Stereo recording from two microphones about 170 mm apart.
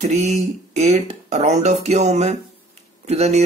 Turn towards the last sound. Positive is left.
turn(degrees=-40)  # may be behind; listen again after turning